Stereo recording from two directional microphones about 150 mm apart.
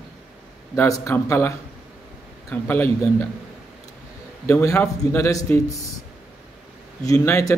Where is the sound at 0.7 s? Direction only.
20° left (ahead or behind).